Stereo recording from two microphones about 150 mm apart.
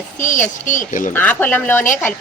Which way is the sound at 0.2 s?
55° left (ahead or behind).